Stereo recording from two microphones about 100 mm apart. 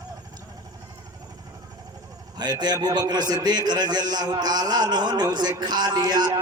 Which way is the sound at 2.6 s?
45° right (ahead or behind).